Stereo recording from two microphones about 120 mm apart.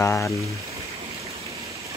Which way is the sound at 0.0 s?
20° left (ahead or behind).